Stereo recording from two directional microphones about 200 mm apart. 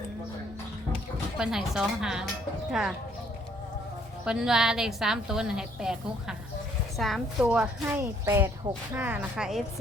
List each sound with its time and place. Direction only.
1.4 s a woman's voice: 5° right (ahead or behind)
4.3 s a woman's voice: 5° right (ahead or behind)
8.7 s speech: 25° right (ahead or behind)
9.0 s a woman's voice: 10° right (ahead or behind)